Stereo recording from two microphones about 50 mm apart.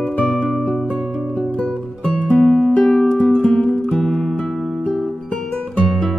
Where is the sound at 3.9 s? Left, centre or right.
Centre.